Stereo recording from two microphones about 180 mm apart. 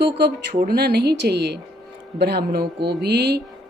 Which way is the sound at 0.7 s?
60° right (ahead or behind).